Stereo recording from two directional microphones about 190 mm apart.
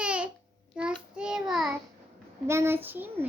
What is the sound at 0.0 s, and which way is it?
Babbling, 5° right (ahead or behind).